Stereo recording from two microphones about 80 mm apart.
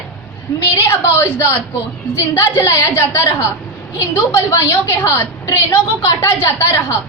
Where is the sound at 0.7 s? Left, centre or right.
Left.